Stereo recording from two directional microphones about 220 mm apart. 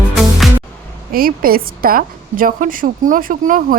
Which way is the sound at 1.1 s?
40° right (ahead or behind).